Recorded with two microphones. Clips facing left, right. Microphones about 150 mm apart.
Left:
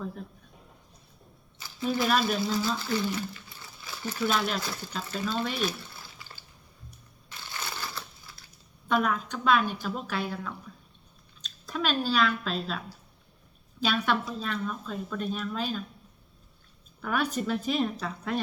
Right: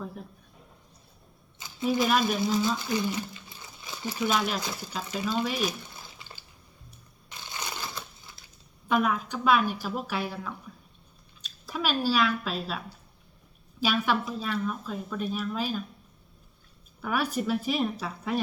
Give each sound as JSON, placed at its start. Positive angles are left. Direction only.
{"t": 1.5, "sound": "a sound", "side_deg": -20}
{"t": 2.2, "sound": "speech", "side_deg": -20}
{"t": 7.3, "sound": "crushing", "side_deg": -20}
{"t": 8.9, "sound": "speech", "side_deg": -10}
{"t": 13.8, "sound": "speech", "side_deg": -10}
{"t": 17.0, "sound": "speech", "side_deg": -10}